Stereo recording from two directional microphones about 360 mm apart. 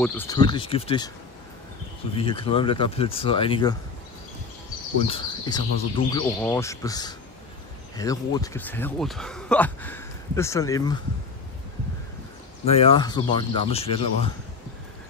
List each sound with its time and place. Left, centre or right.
0.0 s speech: centre
2.1 s speech: centre
5.0 s speech: centre
12.6 s speech: centre